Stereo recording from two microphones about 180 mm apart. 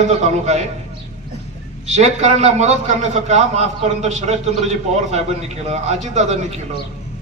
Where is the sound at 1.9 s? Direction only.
40° right (ahead or behind).